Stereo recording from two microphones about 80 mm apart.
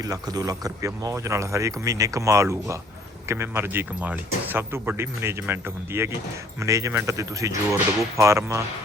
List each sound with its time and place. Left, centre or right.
0.0 s speech: right
6.6 s speech: right